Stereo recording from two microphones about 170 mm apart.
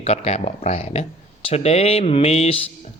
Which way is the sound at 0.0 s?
40° left (ahead or behind).